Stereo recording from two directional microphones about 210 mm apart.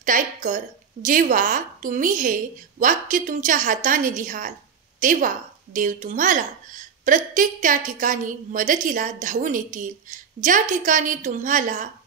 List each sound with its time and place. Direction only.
0.0 s a woman's voice: 40° right (ahead or behind)